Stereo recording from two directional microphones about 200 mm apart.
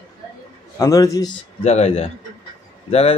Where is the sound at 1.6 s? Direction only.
30° left (ahead or behind).